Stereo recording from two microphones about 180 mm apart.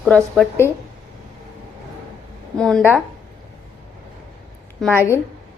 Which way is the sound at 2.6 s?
Centre (ahead or behind).